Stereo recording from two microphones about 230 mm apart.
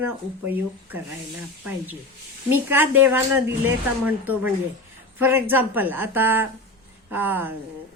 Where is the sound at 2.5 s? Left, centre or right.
Centre.